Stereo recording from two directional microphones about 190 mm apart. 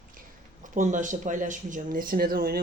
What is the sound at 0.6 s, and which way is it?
Speech, 40° right (ahead or behind).